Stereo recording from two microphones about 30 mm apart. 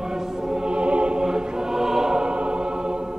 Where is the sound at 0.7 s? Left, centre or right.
Right.